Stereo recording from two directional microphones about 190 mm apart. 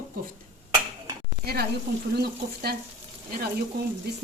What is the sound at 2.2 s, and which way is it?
Frying, 55° right (ahead or behind).